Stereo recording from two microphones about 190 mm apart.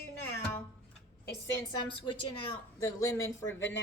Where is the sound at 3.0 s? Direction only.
15° left (ahead or behind).